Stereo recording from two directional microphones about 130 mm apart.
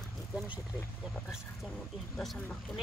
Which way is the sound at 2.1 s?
Centre (ahead or behind).